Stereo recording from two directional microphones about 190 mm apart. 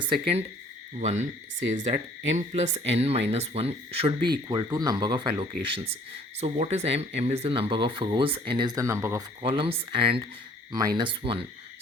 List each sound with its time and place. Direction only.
0.1 s speech: 30° right (ahead or behind); by 9.2 s 15° right (ahead or behind)
9.4 s speech: 30° right (ahead or behind)